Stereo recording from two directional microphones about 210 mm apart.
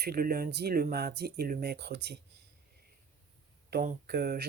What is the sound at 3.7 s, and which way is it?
Speech, 50° right (ahead or behind).